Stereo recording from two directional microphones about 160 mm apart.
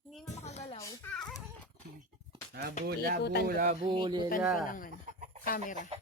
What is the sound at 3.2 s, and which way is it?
Speech, 90° left.